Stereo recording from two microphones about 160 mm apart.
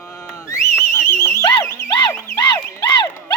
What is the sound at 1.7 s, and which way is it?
Music, 15° left (ahead or behind).